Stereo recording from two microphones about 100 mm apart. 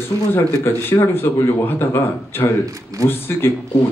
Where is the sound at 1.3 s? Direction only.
25° left (ahead or behind).